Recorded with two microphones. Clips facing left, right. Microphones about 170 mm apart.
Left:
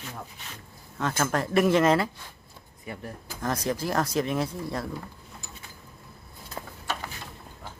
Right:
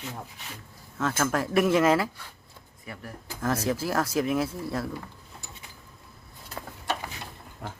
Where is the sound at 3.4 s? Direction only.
5° right (ahead or behind).